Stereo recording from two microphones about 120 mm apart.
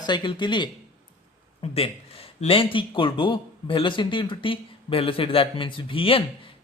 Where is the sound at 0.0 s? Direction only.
40° left (ahead or behind).